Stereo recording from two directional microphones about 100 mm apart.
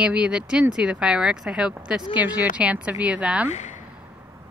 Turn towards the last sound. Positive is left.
turn(degrees=-15)  # may be behind; listen again after turning